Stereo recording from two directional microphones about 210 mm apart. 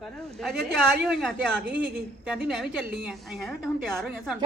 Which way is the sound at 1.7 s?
5° right (ahead or behind).